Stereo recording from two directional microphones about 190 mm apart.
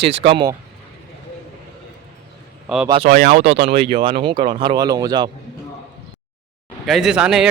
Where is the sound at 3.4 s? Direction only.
55° right (ahead or behind).